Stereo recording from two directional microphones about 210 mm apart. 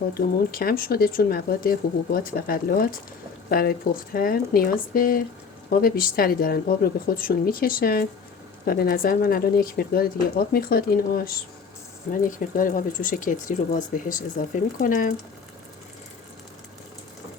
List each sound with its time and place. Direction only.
0.1 s speech: 45° left (ahead or behind)